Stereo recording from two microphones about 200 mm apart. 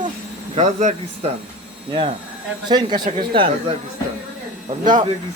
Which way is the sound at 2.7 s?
20° right (ahead or behind).